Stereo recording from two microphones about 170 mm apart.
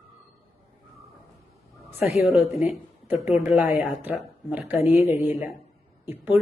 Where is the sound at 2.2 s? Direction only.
Centre (ahead or behind).